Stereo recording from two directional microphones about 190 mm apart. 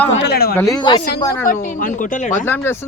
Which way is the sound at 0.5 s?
20° left (ahead or behind).